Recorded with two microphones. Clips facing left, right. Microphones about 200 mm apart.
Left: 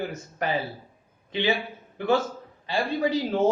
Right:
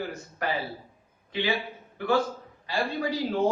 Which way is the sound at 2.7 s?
25° left (ahead or behind).